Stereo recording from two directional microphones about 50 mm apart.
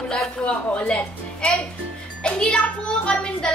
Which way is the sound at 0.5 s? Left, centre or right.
Left.